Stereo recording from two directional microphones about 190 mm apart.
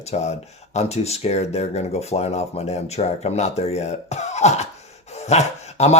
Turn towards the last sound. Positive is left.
turn(degrees=35)  # may be behind; listen again after turning